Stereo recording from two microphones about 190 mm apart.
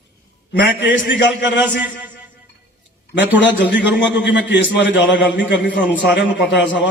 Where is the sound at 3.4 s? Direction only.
70° left (ahead or behind).